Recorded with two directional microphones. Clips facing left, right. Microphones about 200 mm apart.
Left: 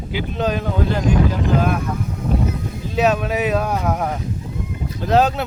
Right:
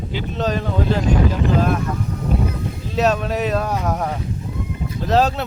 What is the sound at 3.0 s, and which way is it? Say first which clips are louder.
Speech: left 1 dB; 5° left (ahead or behind).